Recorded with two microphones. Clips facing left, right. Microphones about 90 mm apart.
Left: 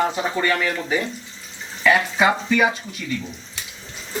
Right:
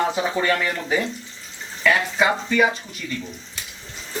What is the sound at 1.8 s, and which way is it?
Speech, 5° left (ahead or behind).